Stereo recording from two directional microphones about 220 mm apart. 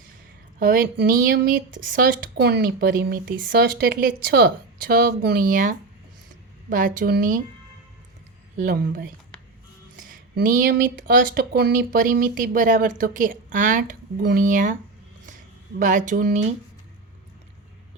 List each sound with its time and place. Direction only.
0.6 s speech: 40° right (ahead or behind)
8.5 s speech: 40° right (ahead or behind)
15.8 s speech: 35° right (ahead or behind)